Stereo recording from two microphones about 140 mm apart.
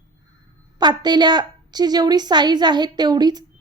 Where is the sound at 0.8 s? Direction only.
30° right (ahead or behind).